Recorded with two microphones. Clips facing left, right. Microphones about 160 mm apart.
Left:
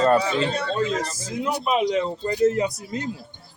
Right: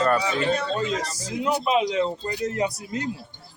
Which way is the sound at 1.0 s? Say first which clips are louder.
Even; 50° left (ahead or behind).